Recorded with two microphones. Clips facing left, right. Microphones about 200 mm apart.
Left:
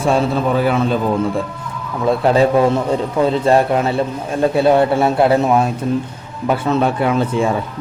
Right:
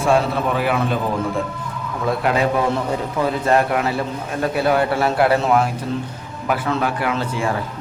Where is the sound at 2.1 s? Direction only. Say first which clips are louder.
Left 6 dB; 30° left (ahead or behind).